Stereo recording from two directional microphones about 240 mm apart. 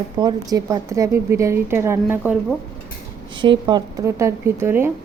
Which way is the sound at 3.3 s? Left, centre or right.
Centre.